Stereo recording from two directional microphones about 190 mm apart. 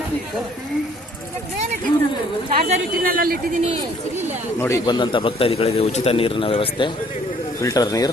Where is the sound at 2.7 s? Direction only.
50° right (ahead or behind).